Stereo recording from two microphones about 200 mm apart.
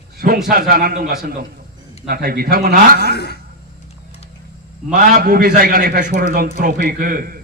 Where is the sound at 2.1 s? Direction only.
50° right (ahead or behind).